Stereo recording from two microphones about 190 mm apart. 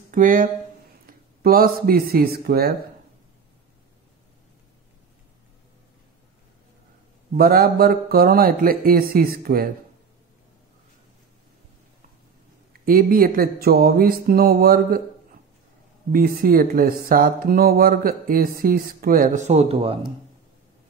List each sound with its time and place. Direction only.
0.1 s speech: 45° right (ahead or behind)
7.3 s speech: 50° right (ahead or behind)
12.8 s speech: 50° right (ahead or behind)
16.1 s speech: 50° right (ahead or behind); by 20.0 s 30° right (ahead or behind)